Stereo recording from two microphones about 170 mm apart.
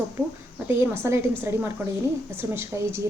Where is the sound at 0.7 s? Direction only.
15° right (ahead or behind).